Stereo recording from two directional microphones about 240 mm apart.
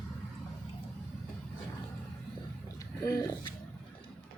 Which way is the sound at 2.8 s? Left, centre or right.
Centre.